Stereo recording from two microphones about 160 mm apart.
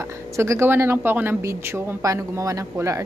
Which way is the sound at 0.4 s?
15° right (ahead or behind).